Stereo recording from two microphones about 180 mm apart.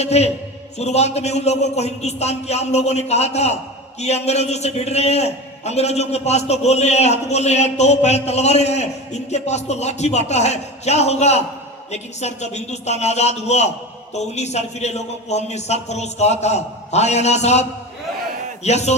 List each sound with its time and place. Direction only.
0.0 s a man's voice: 35° left (ahead or behind)